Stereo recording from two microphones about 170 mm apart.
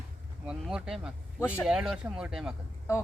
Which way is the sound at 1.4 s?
15° left (ahead or behind).